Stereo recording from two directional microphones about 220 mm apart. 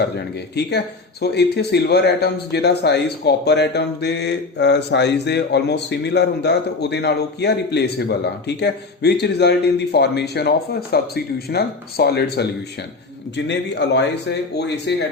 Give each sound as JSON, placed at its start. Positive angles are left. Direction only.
{"t": 0.0, "sound": "speech", "side_deg": 50}